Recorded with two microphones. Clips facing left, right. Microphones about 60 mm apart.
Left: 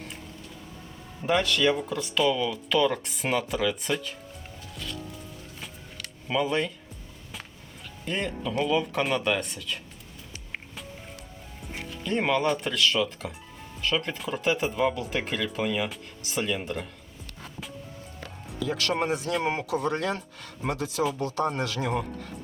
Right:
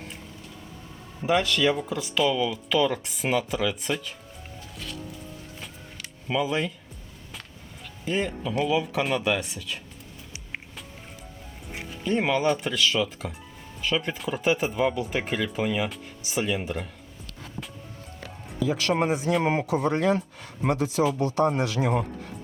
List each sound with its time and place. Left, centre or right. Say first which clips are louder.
1.2 s speech: right 1 dB; centre
5.5 s a sound: even; centre
8.0 s speech: right 3 dB; centre
11.7 s speech: right 3 dB; centre
18.6 s speech: right 3 dB; centre